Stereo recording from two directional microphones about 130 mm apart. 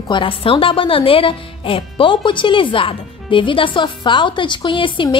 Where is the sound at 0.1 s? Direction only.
40° left (ahead or behind).